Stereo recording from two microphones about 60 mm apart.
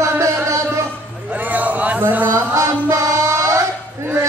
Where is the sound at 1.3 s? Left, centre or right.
Right.